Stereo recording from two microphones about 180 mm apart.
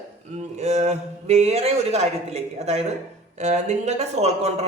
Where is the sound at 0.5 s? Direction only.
40° right (ahead or behind).